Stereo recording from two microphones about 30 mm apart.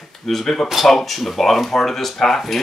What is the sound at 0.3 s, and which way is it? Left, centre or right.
Speech, centre.